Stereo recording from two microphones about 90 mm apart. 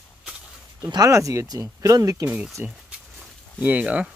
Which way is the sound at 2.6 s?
20° right (ahead or behind).